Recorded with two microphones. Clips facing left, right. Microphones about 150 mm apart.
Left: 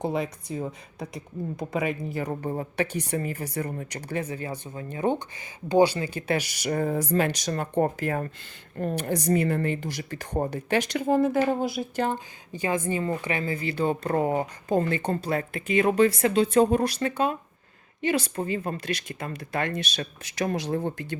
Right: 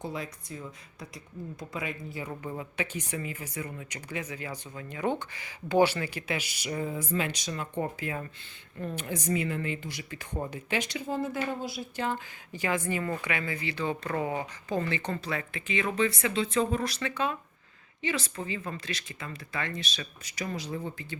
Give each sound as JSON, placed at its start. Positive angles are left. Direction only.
{"t": 0.0, "sound": "speech", "side_deg": 60}
{"t": 2.3, "sound": "speech", "side_deg": 35}
{"t": 6.3, "sound": "speech", "side_deg": 45}
{"t": 8.8, "sound": "a woman's voice", "side_deg": 65}
{"t": 9.0, "sound": "speech", "side_deg": 40}
{"t": 10.9, "sound": "speech", "side_deg": 55}
{"t": 12.1, "sound": "speech", "side_deg": 20}
{"t": 13.2, "sound": "speech", "side_deg": 35}